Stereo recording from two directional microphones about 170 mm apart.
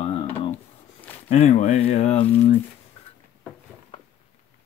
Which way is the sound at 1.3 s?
40° left (ahead or behind).